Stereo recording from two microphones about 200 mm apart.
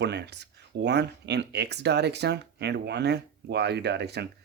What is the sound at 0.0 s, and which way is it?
Speech, 55° right (ahead or behind).